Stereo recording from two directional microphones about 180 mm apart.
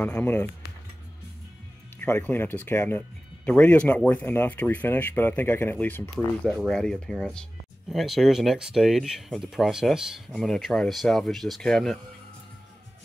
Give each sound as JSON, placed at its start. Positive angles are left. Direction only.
{"t": 0.0, "sound": "speech", "side_deg": 10}
{"t": 2.0, "sound": "speech", "side_deg": 10}